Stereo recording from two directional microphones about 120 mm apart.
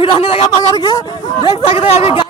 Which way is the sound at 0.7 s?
35° left (ahead or behind).